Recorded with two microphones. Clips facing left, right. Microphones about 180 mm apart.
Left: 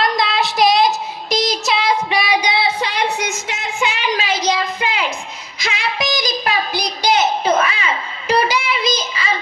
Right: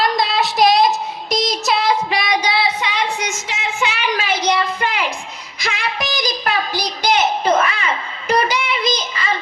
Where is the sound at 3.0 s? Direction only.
65° left (ahead or behind).